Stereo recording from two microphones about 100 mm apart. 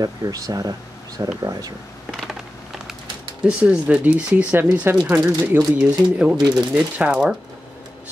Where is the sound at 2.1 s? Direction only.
5° right (ahead or behind).